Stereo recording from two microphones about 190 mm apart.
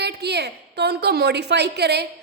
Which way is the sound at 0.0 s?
60° right (ahead or behind).